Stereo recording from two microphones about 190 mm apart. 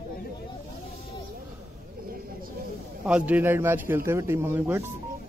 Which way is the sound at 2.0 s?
50° right (ahead or behind).